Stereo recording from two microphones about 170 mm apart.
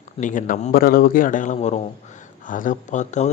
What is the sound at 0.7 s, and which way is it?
Speech, 60° left (ahead or behind).